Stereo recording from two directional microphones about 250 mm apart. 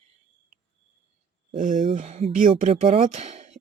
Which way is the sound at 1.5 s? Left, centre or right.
Right.